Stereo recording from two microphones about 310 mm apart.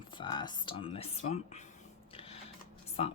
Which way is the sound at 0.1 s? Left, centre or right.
Centre.